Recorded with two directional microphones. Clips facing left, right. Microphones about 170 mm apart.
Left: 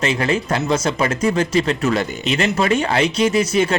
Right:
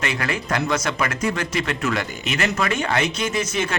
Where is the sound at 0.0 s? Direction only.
25° left (ahead or behind).